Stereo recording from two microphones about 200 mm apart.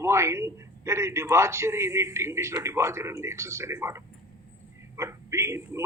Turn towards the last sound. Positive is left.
turn(degrees=-15)  # may be behind; listen again after turning